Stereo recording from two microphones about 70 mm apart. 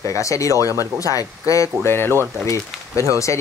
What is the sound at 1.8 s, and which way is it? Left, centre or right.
Speech, left.